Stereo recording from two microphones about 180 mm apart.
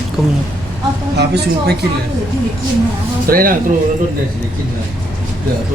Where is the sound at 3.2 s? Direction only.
50° right (ahead or behind).